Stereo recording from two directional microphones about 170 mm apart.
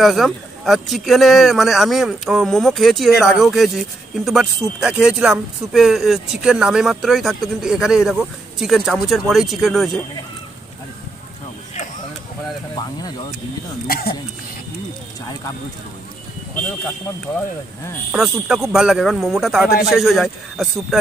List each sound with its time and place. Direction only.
0.0 s speech: centre (ahead or behind)
13.8 s speech: 60° left (ahead or behind)
18.1 s speech: centre (ahead or behind)